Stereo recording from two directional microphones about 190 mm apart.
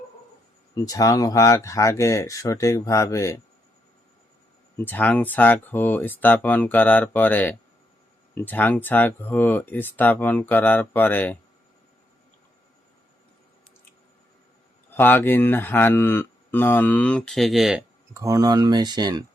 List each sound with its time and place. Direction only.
0.7 s speech: 20° left (ahead or behind)
4.8 s speech: 10° left (ahead or behind)
14.9 s speech: 10° left (ahead or behind)
18.1 s speech: 15° right (ahead or behind)